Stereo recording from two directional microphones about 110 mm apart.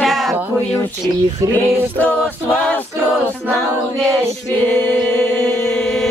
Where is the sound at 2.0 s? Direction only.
15° left (ahead or behind).